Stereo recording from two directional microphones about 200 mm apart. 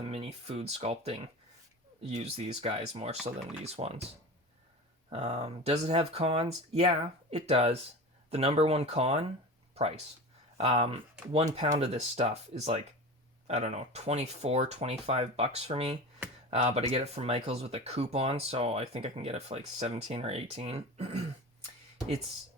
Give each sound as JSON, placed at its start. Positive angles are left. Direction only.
{"t": 0.0, "sound": "speech", "side_deg": -30}
{"t": 5.0, "sound": "speech", "side_deg": -30}
{"t": 10.6, "sound": "speech", "side_deg": -30}